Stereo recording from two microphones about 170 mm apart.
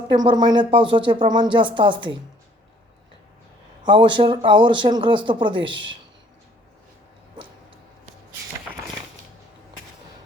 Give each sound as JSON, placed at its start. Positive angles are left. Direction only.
{"t": 0.1, "sound": "speech", "side_deg": -25}
{"t": 3.8, "sound": "speech", "side_deg": -30}